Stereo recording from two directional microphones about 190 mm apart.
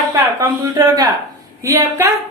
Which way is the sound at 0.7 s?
20° right (ahead or behind).